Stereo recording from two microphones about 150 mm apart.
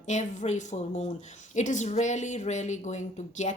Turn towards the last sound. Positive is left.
turn(degrees=55)  # may be behind; listen again after turning